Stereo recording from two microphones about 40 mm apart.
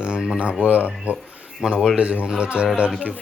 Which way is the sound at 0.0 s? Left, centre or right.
Centre.